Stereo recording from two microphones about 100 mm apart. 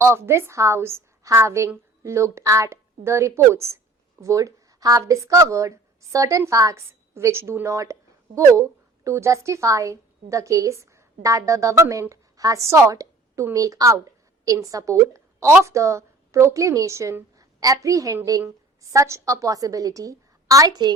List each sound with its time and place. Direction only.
0.0 s a woman's voice: 25° right (ahead or behind)